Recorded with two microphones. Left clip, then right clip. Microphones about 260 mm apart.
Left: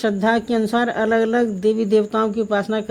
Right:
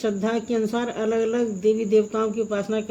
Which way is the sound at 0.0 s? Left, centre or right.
Left.